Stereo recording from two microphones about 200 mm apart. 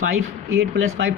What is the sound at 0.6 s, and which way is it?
Speech, 65° right (ahead or behind).